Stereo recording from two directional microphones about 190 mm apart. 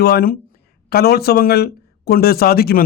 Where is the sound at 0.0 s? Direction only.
55° left (ahead or behind).